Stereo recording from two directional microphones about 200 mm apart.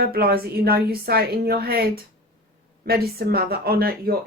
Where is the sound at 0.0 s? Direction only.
50° right (ahead or behind).